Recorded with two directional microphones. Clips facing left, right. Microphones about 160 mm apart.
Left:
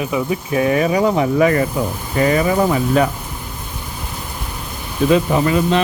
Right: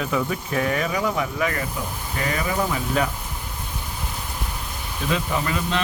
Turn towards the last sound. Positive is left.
turn(degrees=20)  # may be behind; listen again after turning